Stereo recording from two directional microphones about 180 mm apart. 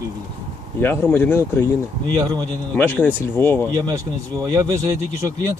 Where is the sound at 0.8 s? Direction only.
10° left (ahead or behind).